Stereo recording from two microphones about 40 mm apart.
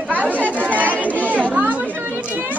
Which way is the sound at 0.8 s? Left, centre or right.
Right.